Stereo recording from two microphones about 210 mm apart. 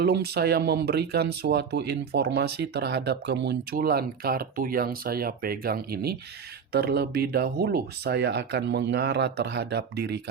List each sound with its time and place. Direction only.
0.0 s speech: 50° right (ahead or behind)